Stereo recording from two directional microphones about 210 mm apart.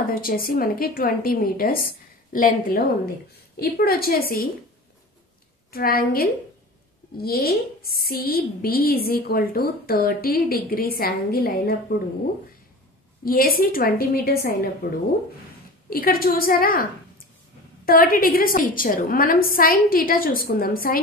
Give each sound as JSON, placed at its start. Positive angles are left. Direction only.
{"t": 0.1, "sound": "a woman's voice", "side_deg": 45}
{"t": 5.7, "sound": "a woman's voice", "side_deg": 45}
{"t": 13.2, "sound": "a woman's voice", "side_deg": 45}
{"t": 15.9, "sound": "a woman's voice", "side_deg": 45}
{"t": 17.8, "sound": "a woman's voice", "side_deg": 45}